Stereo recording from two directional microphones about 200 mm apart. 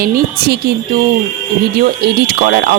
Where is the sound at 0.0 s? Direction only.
50° right (ahead or behind).